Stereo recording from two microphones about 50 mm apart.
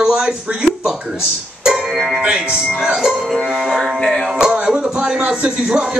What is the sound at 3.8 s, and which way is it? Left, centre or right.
Music, centre.